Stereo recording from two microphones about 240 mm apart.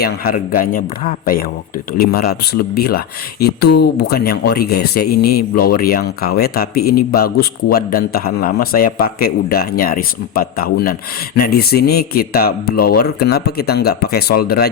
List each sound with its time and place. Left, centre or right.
0.0 s speech: left